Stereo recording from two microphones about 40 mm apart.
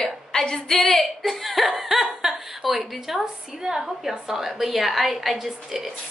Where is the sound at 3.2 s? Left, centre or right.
Centre.